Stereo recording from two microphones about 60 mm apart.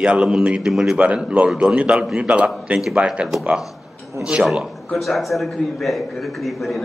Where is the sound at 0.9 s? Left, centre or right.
Right.